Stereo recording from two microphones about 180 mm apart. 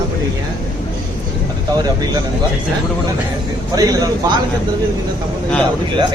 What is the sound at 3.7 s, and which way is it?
Speech, 20° right (ahead or behind).